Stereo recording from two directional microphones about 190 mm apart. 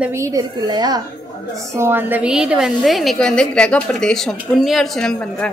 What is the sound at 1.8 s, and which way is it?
A woman's voice, 10° right (ahead or behind).